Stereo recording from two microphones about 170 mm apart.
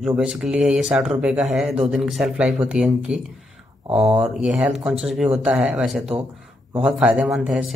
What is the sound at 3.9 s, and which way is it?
Speech, 35° right (ahead or behind).